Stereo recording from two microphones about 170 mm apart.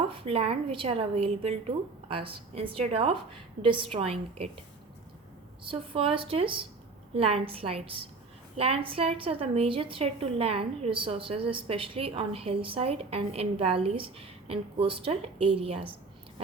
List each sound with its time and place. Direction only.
0.1 s a woman's voice: 35° right (ahead or behind)
5.6 s a woman's voice: 30° right (ahead or behind)